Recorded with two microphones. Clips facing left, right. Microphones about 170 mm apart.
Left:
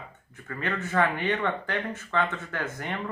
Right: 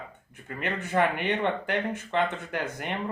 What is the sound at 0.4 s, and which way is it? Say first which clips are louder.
Speech: left 1 dB; 20° right (ahead or behind).